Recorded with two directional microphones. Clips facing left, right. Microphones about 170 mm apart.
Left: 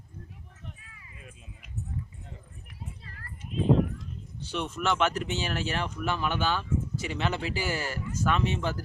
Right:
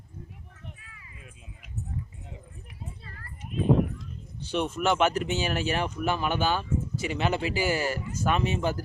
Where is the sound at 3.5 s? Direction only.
55° right (ahead or behind).